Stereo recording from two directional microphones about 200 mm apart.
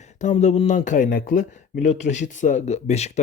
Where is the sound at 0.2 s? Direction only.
35° left (ahead or behind).